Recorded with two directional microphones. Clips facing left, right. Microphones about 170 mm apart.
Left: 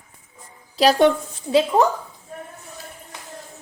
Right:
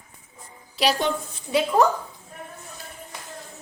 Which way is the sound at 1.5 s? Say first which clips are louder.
Left 4 dB; 25° left (ahead or behind).